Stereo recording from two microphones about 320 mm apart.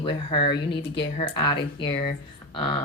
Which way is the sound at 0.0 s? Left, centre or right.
Centre.